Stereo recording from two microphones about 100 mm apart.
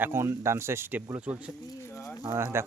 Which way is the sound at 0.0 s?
25° right (ahead or behind).